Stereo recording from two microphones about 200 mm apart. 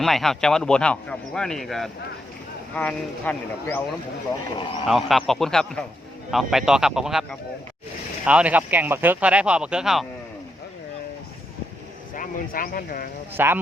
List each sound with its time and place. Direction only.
0.0 s a man's voice: centre (ahead or behind)
4.9 s a man's voice: centre (ahead or behind)
12.1 s speech: 45° left (ahead or behind)
13.3 s speech: 10° right (ahead or behind)